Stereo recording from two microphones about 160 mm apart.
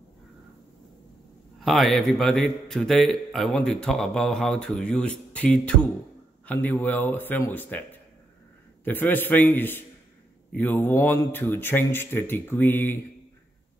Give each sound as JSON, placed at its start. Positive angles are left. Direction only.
{"t": 1.6, "sound": "a man's voice", "side_deg": 0}
{"t": 8.8, "sound": "speech", "side_deg": 10}